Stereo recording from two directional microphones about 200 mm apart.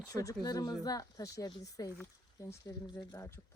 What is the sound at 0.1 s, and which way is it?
Speech, 15° left (ahead or behind).